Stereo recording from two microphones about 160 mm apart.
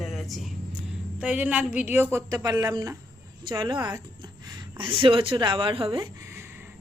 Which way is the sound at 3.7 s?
10° right (ahead or behind).